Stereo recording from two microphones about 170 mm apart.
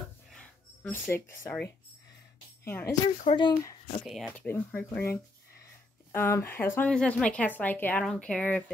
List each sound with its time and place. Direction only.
0.3 s a sound: 5° left (ahead or behind)
2.6 s speech: 15° left (ahead or behind)
3.3 s speech: 25° left (ahead or behind)
4.0 s speech: centre (ahead or behind)